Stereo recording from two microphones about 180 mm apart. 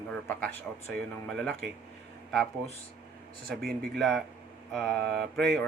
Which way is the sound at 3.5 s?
60° right (ahead or behind).